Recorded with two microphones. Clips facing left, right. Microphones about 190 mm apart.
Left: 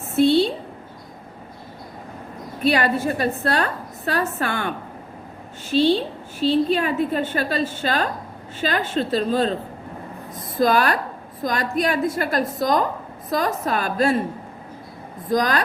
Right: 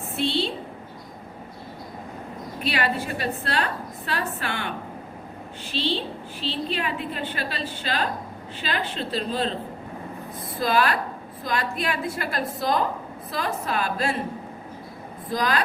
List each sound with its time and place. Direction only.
0.2 s a sound: 45° left (ahead or behind)
2.6 s a woman's voice: 45° left (ahead or behind)
5.7 s a woman's voice: 45° left (ahead or behind)
10.6 s a woman's voice: 45° left (ahead or behind)
15.3 s a woman's voice: 45° left (ahead or behind)